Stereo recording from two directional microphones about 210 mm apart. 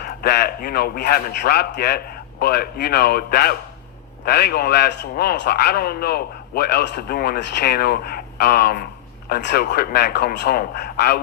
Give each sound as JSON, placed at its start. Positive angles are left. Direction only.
{"t": 0.0, "sound": "a man's voice", "side_deg": 50}